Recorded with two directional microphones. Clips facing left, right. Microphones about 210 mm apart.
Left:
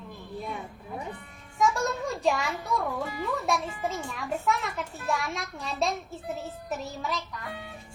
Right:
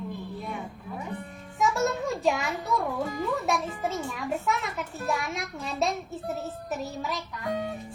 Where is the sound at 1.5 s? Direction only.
5° right (ahead or behind).